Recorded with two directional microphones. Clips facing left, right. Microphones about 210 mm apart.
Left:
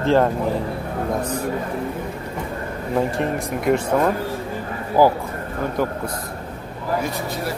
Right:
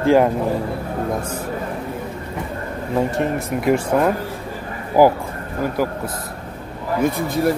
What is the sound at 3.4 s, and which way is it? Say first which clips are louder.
Speech: even; centre (ahead or behind).